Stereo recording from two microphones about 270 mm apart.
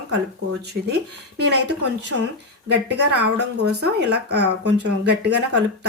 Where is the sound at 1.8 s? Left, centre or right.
Right.